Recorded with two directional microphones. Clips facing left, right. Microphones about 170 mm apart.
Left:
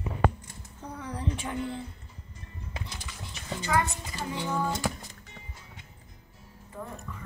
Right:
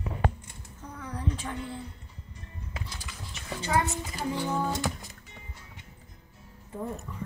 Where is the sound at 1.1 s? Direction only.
20° left (ahead or behind).